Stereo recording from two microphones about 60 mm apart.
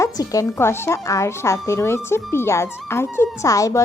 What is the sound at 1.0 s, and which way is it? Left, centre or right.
A woman's voice, left.